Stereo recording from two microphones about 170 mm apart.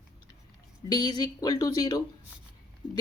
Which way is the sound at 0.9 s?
25° left (ahead or behind).